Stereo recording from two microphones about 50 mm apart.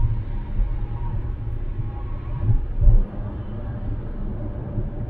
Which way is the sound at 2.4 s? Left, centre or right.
Centre.